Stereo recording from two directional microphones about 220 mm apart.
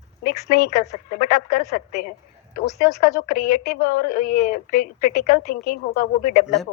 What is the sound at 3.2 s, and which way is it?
Speech, 40° left (ahead or behind).